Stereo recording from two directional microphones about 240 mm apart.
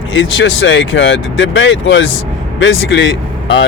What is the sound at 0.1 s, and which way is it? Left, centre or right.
Speech, left.